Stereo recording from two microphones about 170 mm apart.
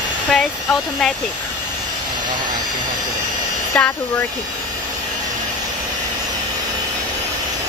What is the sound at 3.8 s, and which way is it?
Speech, 5° left (ahead or behind).